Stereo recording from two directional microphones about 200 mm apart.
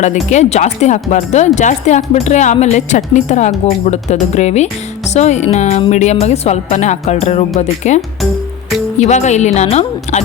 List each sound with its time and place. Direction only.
0.0 s speech: 35° left (ahead or behind)